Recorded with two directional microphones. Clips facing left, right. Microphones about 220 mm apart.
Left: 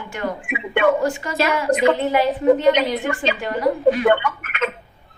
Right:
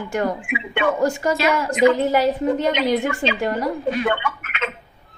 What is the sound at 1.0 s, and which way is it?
A woman's voice, 40° right (ahead or behind).